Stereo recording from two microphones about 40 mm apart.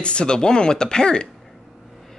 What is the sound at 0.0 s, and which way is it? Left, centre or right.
Speech, left.